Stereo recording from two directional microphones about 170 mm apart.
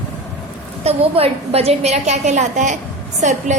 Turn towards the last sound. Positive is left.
turn(degrees=-45)  # may be behind; listen again after turning